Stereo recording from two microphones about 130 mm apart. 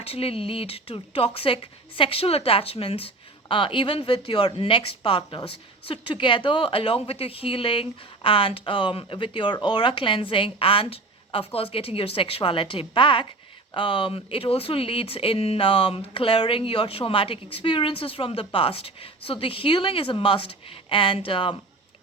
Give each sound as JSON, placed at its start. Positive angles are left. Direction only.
{"t": 0.0, "sound": "a woman's voice", "side_deg": 50}